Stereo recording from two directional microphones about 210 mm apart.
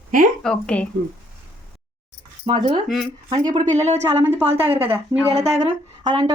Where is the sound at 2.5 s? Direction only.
25° right (ahead or behind).